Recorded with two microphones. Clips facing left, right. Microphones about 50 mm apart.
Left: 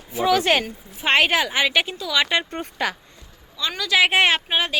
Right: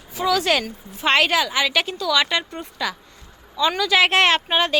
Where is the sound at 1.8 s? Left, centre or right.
Centre.